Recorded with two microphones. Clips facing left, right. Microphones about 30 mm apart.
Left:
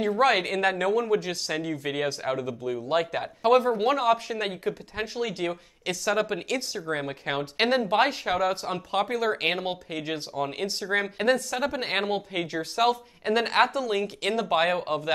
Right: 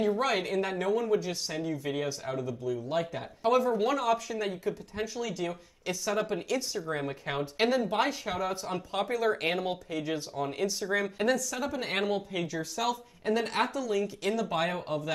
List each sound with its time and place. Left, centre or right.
0.0 s speech: left
6.3 s speech: left